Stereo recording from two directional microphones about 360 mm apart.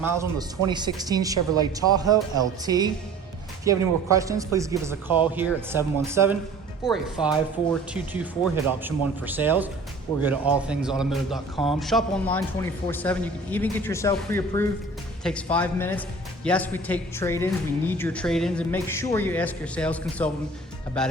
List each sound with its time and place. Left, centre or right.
0.0 s speech: centre
5.0 s speech: centre
5.5 s speech: centre